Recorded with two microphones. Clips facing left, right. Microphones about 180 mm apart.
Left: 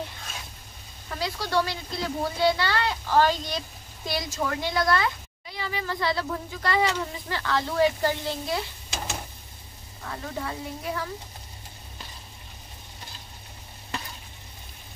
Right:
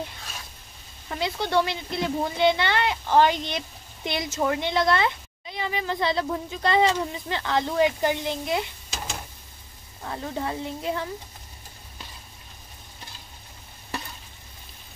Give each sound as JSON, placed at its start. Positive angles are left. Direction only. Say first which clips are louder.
{"t": 1.2, "sound": "speech", "louder": "right 3 dB", "side_deg": -20}
{"t": 10.0, "sound": "speech", "louder": "right 3 dB", "side_deg": -25}